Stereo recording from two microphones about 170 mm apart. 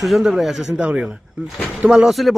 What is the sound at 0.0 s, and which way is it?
Speech, centre (ahead or behind).